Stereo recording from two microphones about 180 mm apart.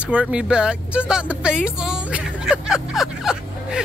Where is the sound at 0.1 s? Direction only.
5° right (ahead or behind).